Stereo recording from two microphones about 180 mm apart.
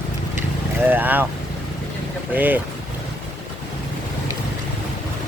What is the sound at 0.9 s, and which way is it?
Speech, 10° right (ahead or behind).